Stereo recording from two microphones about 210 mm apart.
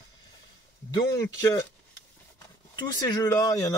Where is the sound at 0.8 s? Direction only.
15° left (ahead or behind).